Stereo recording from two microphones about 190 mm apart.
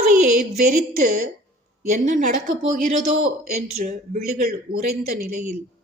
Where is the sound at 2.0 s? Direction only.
40° right (ahead or behind).